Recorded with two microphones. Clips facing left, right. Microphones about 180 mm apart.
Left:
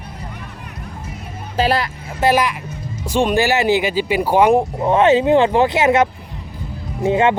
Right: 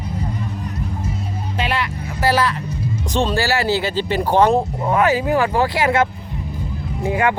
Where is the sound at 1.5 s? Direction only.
35° left (ahead or behind).